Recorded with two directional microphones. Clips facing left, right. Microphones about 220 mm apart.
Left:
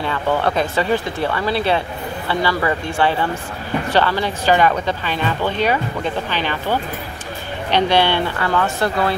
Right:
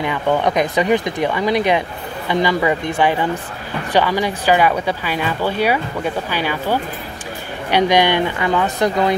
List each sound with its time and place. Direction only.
0.0 s speech: 15° right (ahead or behind)